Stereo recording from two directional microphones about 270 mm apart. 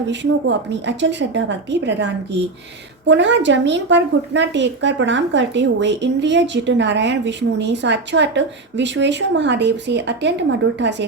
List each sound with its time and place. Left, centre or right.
0.1 s a woman's voice: right
3.1 s a woman's voice: right